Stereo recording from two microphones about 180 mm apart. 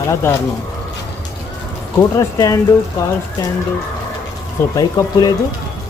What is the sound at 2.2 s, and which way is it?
Speech, 15° left (ahead or behind).